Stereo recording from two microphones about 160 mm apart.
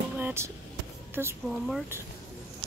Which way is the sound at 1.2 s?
10° right (ahead or behind).